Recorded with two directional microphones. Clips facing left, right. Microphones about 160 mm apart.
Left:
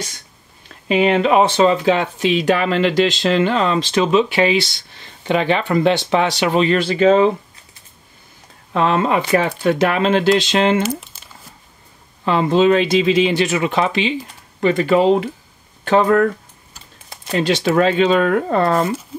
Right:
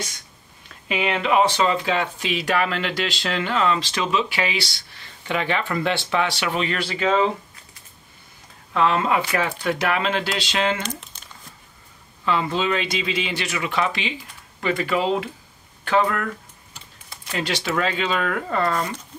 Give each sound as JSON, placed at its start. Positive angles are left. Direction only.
{"t": 0.8, "sound": "speech", "side_deg": 30}
{"t": 8.7, "sound": "speech", "side_deg": 30}
{"t": 11.1, "sound": "crumpling", "side_deg": 5}
{"t": 12.3, "sound": "speech", "side_deg": 30}
{"t": 17.3, "sound": "speech", "side_deg": 25}